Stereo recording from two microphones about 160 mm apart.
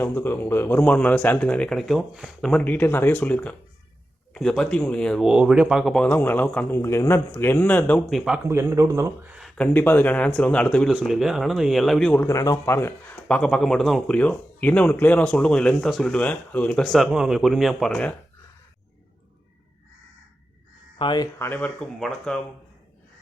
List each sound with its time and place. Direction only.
0.0 s speech: 15° left (ahead or behind)
8.4 s speech: 20° right (ahead or behind)
9.4 s speech: 10° left (ahead or behind)
21.0 s speech: 30° left (ahead or behind)
21.3 s speech: 15° left (ahead or behind)